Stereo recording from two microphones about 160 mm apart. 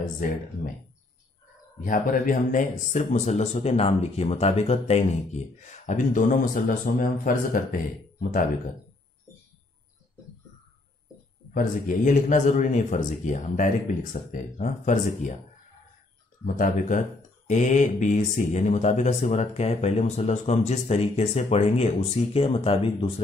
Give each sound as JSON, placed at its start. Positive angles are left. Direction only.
{"t": 1.8, "sound": "speech", "side_deg": 55}
{"t": 11.5, "sound": "speech", "side_deg": 55}
{"t": 16.4, "sound": "speech", "side_deg": 55}